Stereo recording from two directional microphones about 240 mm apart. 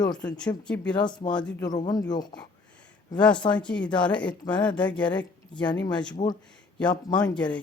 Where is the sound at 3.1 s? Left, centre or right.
Centre.